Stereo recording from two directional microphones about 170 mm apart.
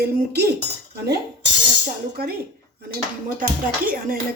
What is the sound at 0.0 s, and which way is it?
Speech, 65° right (ahead or behind).